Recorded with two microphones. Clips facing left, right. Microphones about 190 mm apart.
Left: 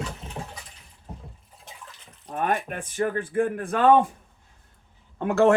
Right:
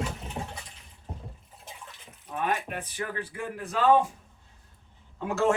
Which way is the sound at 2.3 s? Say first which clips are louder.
Left 3 dB; 45° left (ahead or behind).